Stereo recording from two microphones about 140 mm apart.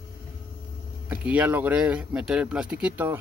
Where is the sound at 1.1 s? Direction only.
10° right (ahead or behind).